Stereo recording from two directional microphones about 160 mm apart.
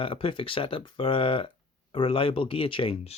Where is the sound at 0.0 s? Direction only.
35° left (ahead or behind).